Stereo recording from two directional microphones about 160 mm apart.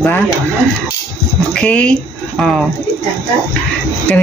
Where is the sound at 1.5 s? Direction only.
5° left (ahead or behind).